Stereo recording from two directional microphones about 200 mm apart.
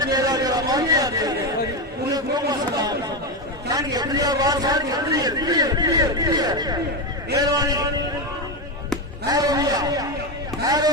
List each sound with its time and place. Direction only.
0.0 s a sound: 20° right (ahead or behind)
7.3 s a man's voice: 20° right (ahead or behind)
9.3 s speech: 20° right (ahead or behind)